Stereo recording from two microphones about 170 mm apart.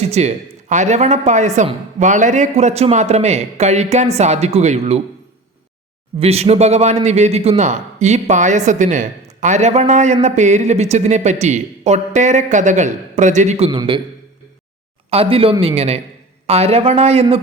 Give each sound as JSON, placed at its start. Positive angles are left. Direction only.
{"t": 0.1, "sound": "a woman's voice", "side_deg": -40}
{"t": 6.1, "sound": "a woman's voice", "side_deg": -35}
{"t": 13.7, "sound": "a man's voice", "side_deg": -30}
{"t": 15.1, "sound": "a woman's voice", "side_deg": -35}